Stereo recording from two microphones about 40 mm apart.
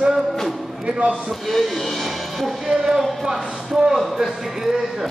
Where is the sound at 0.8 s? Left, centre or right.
Right.